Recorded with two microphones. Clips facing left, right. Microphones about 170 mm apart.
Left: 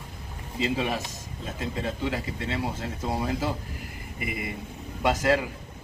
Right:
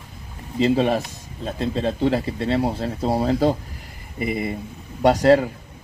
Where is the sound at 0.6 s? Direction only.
40° right (ahead or behind).